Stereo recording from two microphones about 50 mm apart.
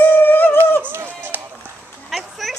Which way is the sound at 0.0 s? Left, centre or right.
Left.